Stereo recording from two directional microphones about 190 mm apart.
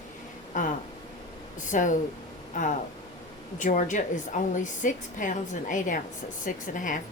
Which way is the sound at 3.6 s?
40° left (ahead or behind).